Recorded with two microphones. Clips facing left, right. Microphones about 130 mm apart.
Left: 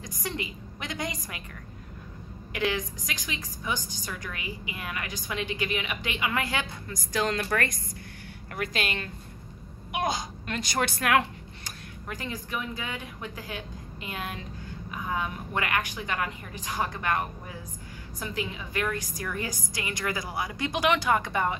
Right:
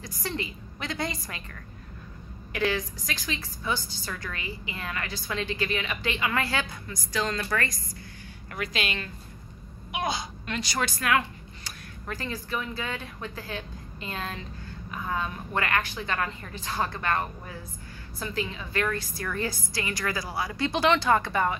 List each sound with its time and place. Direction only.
0.0 s a woman's voice: 15° left (ahead or behind)
2.5 s a woman's voice: 20° left (ahead or behind)
6.9 s a child's voice: 50° left (ahead or behind)
8.5 s a child's voice: 45° left (ahead or behind); by 11.2 s 60° left (ahead or behind)
12.1 s a woman's voice: 15° left (ahead or behind)